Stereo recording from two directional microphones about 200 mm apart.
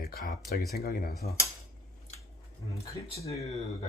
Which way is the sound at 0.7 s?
50° left (ahead or behind).